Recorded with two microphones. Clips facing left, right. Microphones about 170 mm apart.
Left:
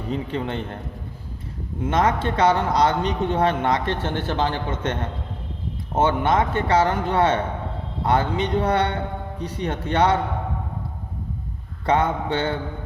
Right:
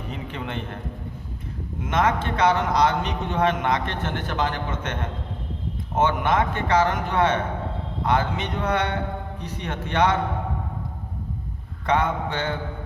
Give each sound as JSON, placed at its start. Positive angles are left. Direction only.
{"t": 0.1, "sound": "a man's voice", "side_deg": 35}
{"t": 1.8, "sound": "a man's voice", "side_deg": 30}
{"t": 11.9, "sound": "a man's voice", "side_deg": 30}